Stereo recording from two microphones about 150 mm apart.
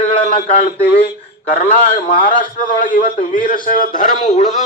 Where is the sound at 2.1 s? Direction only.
35° left (ahead or behind).